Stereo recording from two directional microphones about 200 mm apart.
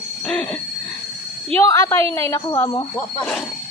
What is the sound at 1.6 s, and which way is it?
Speech, 15° left (ahead or behind).